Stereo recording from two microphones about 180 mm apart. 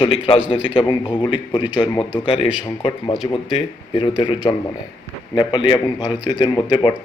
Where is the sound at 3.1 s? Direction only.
Centre (ahead or behind).